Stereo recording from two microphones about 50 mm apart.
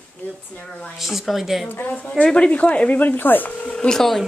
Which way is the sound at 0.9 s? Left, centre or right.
Centre.